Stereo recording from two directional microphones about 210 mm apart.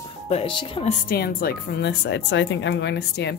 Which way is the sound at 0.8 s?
45° left (ahead or behind).